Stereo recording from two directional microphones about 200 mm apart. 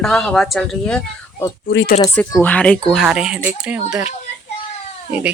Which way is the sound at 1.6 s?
60° left (ahead or behind).